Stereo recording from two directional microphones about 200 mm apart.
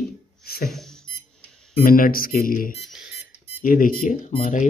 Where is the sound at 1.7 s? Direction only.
45° left (ahead or behind).